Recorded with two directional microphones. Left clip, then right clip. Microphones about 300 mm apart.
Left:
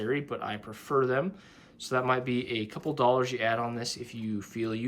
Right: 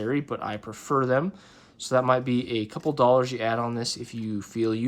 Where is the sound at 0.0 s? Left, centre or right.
Centre.